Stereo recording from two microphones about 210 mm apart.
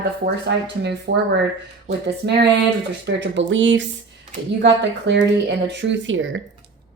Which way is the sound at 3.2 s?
60° right (ahead or behind).